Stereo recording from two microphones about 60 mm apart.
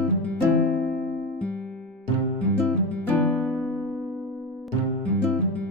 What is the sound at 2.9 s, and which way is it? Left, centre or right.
Music, left.